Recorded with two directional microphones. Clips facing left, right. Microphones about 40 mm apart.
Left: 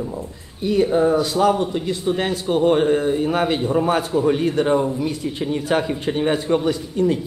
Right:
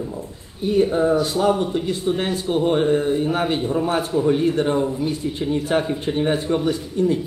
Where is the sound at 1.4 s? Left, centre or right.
Left.